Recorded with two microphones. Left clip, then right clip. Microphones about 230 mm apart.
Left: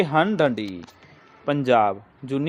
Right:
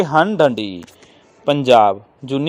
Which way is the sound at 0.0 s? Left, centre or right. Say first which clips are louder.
Right 6 dB; centre.